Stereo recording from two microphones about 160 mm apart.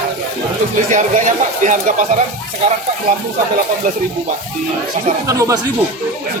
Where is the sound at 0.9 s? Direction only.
50° right (ahead or behind).